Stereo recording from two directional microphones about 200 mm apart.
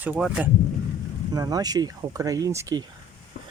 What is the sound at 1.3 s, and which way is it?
Speech, 20° right (ahead or behind).